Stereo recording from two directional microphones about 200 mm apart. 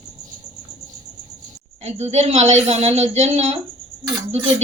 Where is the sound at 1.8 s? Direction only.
35° right (ahead or behind).